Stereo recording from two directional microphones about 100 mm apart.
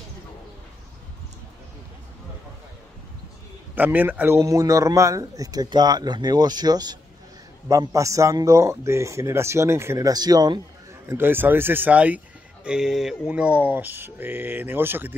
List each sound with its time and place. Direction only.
3.7 s a man's voice: 15° right (ahead or behind)
4.4 s speech: 30° right (ahead or behind)
10.0 s speech: 40° right (ahead or behind)
11.1 s a sound: 20° right (ahead or behind)